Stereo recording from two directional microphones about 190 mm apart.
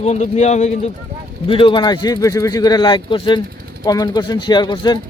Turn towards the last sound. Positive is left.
turn(degrees=20)  # may be behind; listen again after turning